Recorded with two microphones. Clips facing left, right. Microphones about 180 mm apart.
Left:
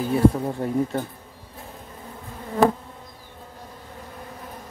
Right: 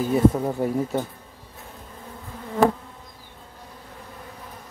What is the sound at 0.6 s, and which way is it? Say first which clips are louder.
Speech: right 4 dB; 5° right (ahead or behind).